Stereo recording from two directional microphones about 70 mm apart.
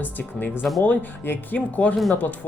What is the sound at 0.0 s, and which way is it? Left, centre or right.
Speech, left.